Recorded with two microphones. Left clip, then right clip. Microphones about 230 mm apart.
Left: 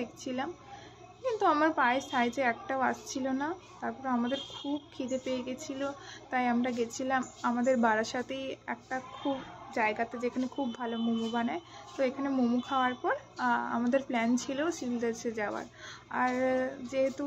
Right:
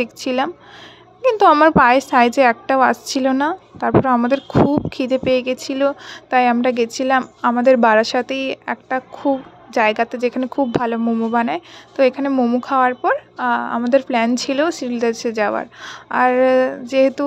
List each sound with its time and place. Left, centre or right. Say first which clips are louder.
0.0 s speech: right 17 dB; right